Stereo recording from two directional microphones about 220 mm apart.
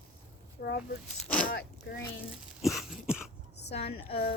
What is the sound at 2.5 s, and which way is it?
Cough, centre (ahead or behind).